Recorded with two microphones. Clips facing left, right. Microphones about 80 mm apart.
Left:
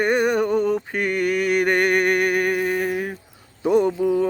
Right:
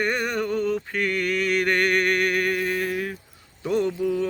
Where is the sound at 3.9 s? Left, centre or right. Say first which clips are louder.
Left 4 dB; left.